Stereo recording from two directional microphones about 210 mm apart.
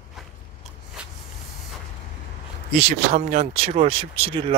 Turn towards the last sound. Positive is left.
turn(degrees=-25)  # may be behind; listen again after turning